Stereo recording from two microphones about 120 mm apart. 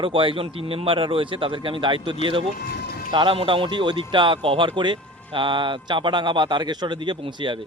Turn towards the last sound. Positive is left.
turn(degrees=-40)  # may be behind; listen again after turning